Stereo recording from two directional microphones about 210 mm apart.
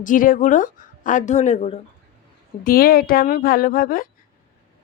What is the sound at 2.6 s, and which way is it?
A woman's voice, 45° left (ahead or behind).